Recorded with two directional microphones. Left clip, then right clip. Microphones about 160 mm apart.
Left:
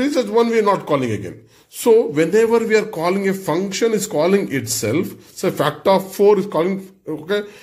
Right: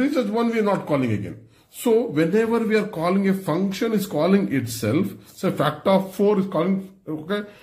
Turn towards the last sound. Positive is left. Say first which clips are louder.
# left 6 dB
turn(degrees=10)  # may be behind; listen again after turning